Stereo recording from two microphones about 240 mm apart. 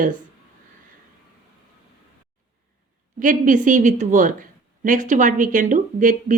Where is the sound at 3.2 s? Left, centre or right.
Right.